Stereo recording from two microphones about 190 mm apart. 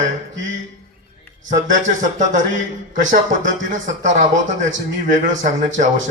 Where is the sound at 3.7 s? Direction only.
40° right (ahead or behind).